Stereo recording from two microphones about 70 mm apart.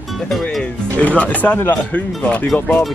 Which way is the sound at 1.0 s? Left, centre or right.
Left.